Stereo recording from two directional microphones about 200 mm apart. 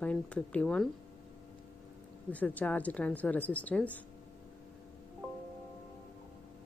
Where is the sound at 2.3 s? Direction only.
10° left (ahead or behind).